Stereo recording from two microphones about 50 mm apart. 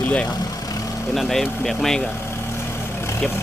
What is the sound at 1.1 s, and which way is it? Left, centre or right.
Speech, centre.